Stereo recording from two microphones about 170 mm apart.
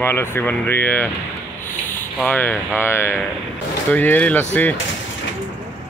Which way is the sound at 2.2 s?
5° left (ahead or behind).